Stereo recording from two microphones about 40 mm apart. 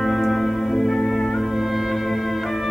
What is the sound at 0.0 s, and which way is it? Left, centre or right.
Music, centre.